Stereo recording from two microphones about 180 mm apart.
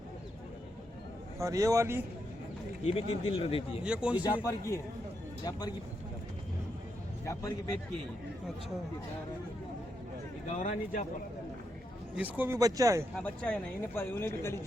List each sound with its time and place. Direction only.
1.4 s a man's voice: 15° right (ahead or behind)
2.8 s speech: 30° left (ahead or behind)
3.8 s a man's voice: 5° right (ahead or behind)
4.4 s speech: 15° left (ahead or behind)
7.3 s speech: 20° left (ahead or behind)
10.4 s speech: 40° left (ahead or behind)
12.1 s a man's voice: 10° right (ahead or behind)
13.1 s speech: 5° left (ahead or behind)